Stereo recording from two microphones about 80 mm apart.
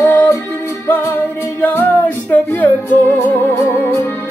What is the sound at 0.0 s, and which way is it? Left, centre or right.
Music, left.